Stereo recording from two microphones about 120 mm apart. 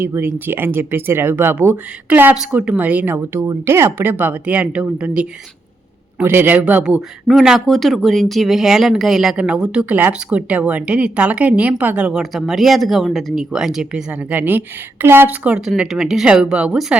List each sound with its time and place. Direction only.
0.0 s speech: 20° right (ahead or behind)